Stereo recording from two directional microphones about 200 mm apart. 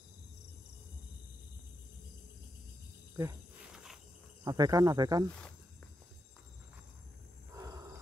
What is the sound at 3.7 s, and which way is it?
Cricket, 5° right (ahead or behind).